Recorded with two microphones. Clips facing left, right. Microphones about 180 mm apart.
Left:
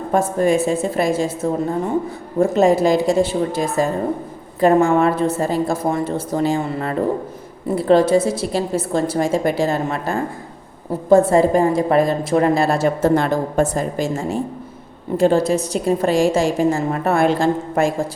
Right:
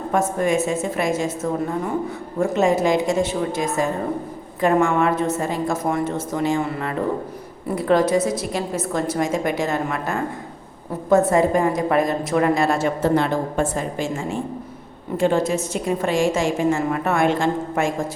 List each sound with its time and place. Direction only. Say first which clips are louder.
0.1 s a woman's voice: left 4 dB; 35° left (ahead or behind)